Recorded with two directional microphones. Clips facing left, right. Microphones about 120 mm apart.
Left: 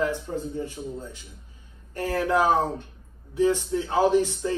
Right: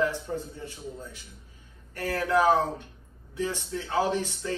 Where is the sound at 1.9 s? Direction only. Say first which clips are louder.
Left 2 dB; 20° left (ahead or behind).